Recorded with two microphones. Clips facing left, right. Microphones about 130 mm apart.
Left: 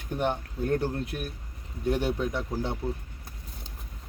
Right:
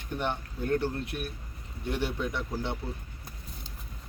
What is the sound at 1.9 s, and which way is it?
Speech, 45° left (ahead or behind).